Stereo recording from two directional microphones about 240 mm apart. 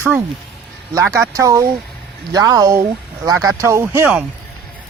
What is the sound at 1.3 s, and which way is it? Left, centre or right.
Speech, centre.